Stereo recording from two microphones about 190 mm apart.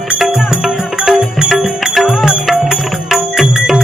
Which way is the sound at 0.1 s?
5° right (ahead or behind).